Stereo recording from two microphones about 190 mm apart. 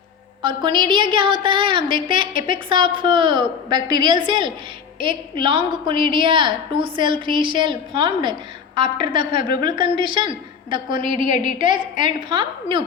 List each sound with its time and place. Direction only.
0.4 s a woman's voice: 25° right (ahead or behind)
10.9 s a woman's voice: 40° left (ahead or behind)
11.5 s a woman's voice: 25° right (ahead or behind)